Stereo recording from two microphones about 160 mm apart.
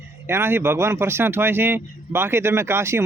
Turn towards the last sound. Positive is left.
turn(degrees=-15)  # may be behind; listen again after turning